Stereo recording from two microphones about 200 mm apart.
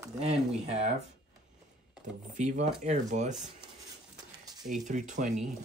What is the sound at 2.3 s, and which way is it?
Speech, 40° right (ahead or behind).